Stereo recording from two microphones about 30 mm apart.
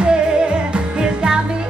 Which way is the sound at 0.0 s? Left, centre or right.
Right.